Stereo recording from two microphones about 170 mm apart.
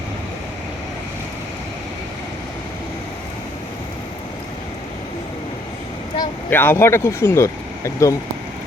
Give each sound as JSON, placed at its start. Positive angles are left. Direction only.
{"t": 6.5, "sound": "speech", "side_deg": 10}